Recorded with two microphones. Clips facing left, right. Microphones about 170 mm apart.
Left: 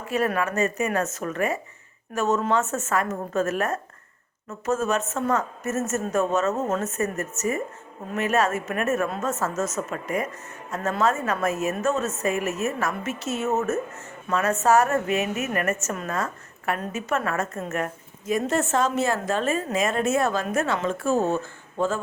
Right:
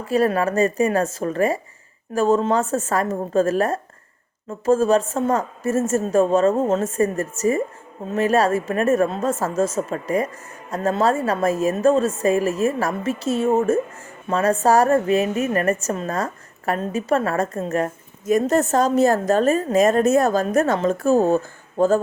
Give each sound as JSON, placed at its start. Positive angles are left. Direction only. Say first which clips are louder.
{"t": 0.0, "sound": "a woman's voice", "louder": "right 6 dB", "side_deg": -35}